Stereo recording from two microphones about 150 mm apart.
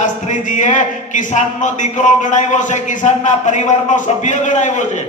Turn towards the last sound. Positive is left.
turn(degrees=55)  # may be behind; listen again after turning